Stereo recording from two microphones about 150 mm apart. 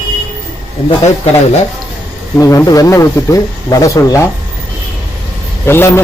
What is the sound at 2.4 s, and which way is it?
Speech, 20° left (ahead or behind).